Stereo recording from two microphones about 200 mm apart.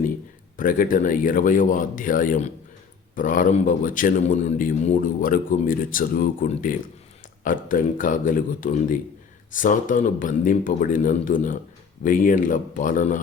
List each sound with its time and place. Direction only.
0.5 s a man's voice: 45° left (ahead or behind)